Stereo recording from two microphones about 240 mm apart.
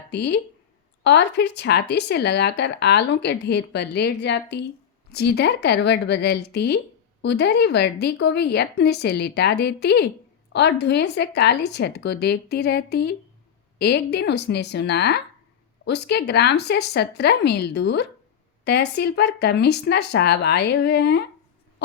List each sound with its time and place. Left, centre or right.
0.1 s speech: left